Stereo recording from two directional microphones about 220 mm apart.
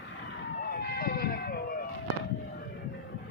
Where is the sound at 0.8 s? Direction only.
45° left (ahead or behind).